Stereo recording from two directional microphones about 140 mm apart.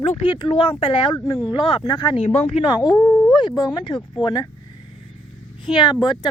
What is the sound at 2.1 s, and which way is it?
Speech, 45° left (ahead or behind).